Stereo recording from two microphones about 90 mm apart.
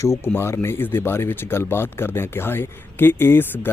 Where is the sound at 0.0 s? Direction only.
30° left (ahead or behind).